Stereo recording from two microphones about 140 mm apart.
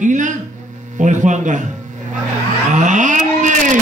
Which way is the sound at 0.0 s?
65° right (ahead or behind).